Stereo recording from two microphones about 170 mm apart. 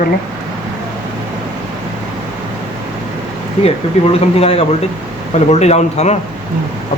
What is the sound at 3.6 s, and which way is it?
Speech, 35° left (ahead or behind).